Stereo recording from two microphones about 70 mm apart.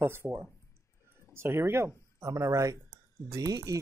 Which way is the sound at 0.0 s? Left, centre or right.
Right.